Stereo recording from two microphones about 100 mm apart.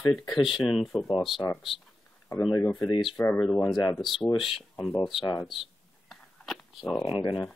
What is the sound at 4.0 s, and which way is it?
Speech, centre (ahead or behind).